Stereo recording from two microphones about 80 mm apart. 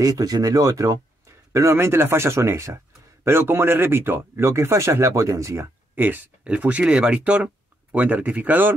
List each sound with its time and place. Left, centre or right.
0.0 s speech: right
5.9 s speech: right